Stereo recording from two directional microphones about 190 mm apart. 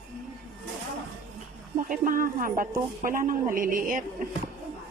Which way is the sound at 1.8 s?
45° right (ahead or behind).